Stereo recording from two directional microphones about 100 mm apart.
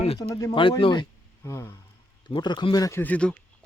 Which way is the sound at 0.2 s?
40° left (ahead or behind).